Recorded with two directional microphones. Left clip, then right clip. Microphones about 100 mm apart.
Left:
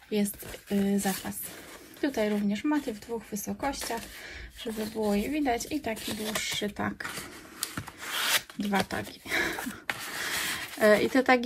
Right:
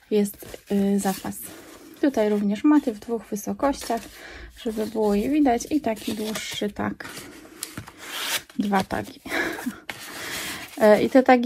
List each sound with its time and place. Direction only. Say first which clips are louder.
0.1 s speech: right 8 dB; 25° right (ahead or behind)
5.1 s speech: right 7 dB; 30° right (ahead or behind)
6.0 s speech: right 5 dB; 20° left (ahead or behind)
6.3 s speech: right 2 dB; 10° right (ahead or behind)
8.1 s rub: left 1 dB; 25° left (ahead or behind)
8.8 s speech: right 5 dB; 10° right (ahead or behind)
10.0 s a sound: right 1 dB; centre (ahead or behind)